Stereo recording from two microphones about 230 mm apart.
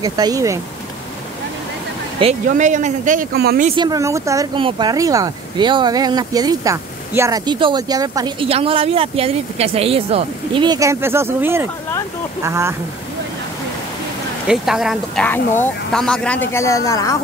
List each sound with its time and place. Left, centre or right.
0.0 s speech: centre
2.1 s speech: right
3.6 s speech: centre
14.5 s speech: centre